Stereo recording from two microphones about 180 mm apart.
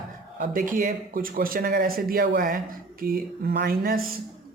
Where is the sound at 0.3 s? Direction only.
45° right (ahead or behind).